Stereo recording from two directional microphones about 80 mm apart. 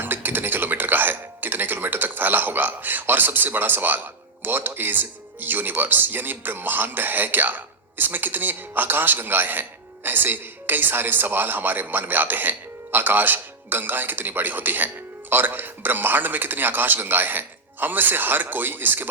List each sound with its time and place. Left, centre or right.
0.0 s music: right
4.4 s speech: right